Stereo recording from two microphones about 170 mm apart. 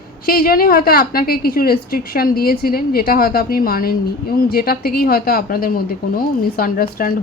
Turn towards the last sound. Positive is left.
turn(degrees=60)  # may be behind; listen again after turning